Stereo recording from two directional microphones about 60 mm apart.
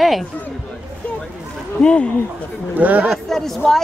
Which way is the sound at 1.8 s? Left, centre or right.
Centre.